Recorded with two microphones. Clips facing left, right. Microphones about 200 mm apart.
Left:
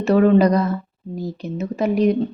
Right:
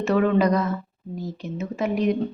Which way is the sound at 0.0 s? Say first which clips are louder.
Left 5 dB; 35° left (ahead or behind).